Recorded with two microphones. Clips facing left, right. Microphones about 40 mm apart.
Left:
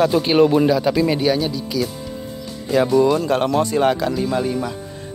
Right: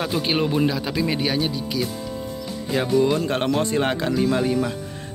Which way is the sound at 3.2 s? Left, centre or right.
Right.